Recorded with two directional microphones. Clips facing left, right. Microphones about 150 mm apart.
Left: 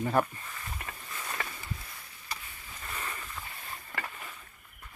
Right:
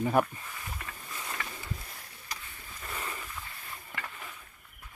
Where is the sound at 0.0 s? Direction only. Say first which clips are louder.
Right 1 dB; 10° right (ahead or behind).